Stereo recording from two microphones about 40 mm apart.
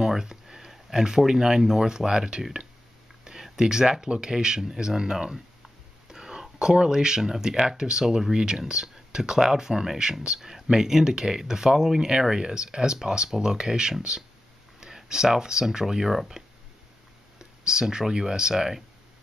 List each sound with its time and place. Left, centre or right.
0.0 s speech: centre
3.3 s a sound: centre
4.1 s speech: centre